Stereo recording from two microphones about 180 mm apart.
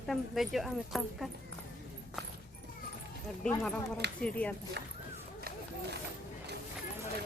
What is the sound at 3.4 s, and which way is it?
Speech, 5° left (ahead or behind).